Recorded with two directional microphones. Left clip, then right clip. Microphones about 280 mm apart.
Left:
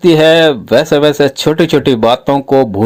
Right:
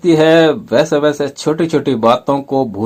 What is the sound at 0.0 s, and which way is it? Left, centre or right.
Speech, left.